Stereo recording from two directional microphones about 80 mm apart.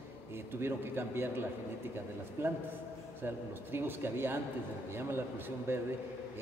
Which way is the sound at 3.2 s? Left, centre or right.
Right.